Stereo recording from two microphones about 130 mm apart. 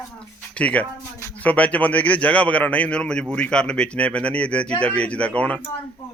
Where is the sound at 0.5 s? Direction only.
10° left (ahead or behind).